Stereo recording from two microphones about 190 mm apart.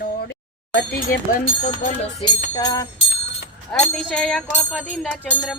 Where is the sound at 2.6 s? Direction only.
15° left (ahead or behind).